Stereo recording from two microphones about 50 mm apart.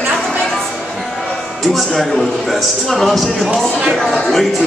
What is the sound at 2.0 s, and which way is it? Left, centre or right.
A man's voice, centre.